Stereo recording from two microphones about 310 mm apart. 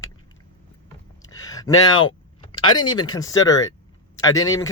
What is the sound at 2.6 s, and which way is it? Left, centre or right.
Speech, centre.